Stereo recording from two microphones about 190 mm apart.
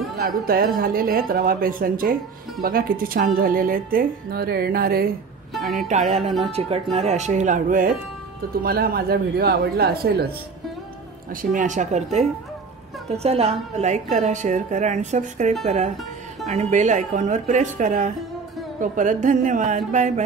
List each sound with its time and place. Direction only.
0.2 s speech: 50° right (ahead or behind)
5.9 s speech: 35° right (ahead or behind); by 10.3 s 55° right (ahead or behind)
11.5 s speech: 40° right (ahead or behind)